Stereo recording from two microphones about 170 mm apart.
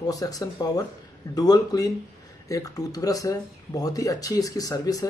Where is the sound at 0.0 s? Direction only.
20° left (ahead or behind).